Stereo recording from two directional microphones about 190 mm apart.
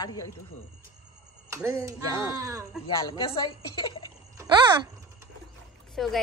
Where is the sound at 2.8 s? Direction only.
30° left (ahead or behind).